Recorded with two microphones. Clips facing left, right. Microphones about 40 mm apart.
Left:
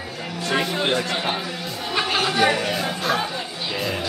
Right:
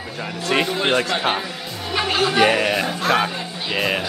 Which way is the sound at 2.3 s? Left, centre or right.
Right.